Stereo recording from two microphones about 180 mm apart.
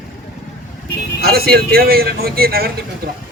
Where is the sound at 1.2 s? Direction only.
60° right (ahead or behind).